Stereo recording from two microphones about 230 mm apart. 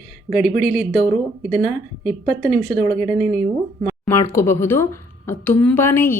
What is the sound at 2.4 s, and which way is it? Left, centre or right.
Speech, centre.